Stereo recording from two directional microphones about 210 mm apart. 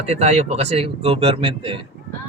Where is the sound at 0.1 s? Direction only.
30° right (ahead or behind).